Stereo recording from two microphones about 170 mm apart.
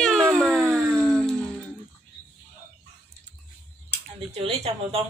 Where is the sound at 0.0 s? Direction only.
Centre (ahead or behind).